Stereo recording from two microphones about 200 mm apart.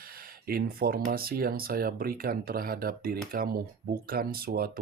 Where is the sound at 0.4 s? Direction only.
50° right (ahead or behind).